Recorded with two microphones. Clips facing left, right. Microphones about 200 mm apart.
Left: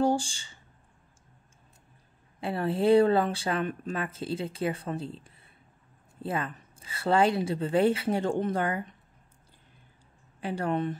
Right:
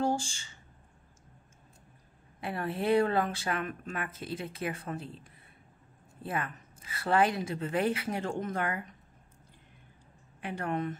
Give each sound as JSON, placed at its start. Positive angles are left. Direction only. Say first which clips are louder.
{"t": 0.0, "sound": "speech", "louder": "left 5 dB", "side_deg": 30}
{"t": 2.4, "sound": "speech", "louder": "left 6 dB", "side_deg": 30}
{"t": 6.2, "sound": "speech", "louder": "left 3 dB", "side_deg": 30}
{"t": 10.4, "sound": "a woman's voice", "louder": "left 4 dB", "side_deg": 30}